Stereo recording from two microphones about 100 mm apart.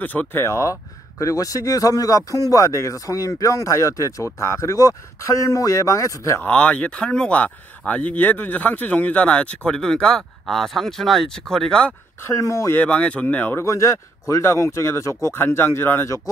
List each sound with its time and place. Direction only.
0.0 s speech: 15° left (ahead or behind)
6.4 s speech: 10° left (ahead or behind)
12.2 s speech: 30° left (ahead or behind)
12.7 s speech: 15° left (ahead or behind)